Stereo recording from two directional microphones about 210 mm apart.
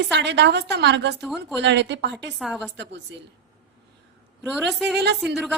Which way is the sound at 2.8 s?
55° right (ahead or behind).